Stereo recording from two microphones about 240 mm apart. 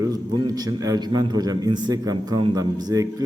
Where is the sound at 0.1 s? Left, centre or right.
Centre.